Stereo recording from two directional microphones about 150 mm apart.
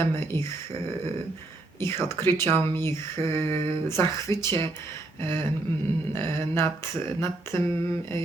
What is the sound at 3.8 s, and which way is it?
Speech, 20° left (ahead or behind).